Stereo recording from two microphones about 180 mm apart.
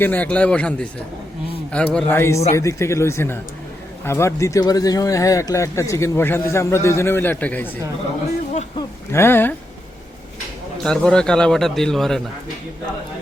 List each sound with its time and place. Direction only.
0.0 s speech: 10° left (ahead or behind)
9.1 s speech: 10° left (ahead or behind)
10.8 s a man's voice: 5° left (ahead or behind)